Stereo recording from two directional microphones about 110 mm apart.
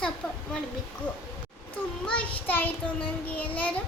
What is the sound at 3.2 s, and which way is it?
Child singing, 15° left (ahead or behind).